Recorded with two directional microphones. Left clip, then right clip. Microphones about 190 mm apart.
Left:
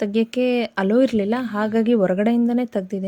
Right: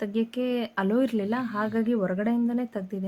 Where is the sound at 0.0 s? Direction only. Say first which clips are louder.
Left 8 dB; 30° left (ahead or behind).